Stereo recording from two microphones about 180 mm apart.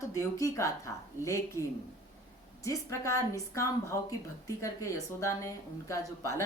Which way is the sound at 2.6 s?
15° left (ahead or behind).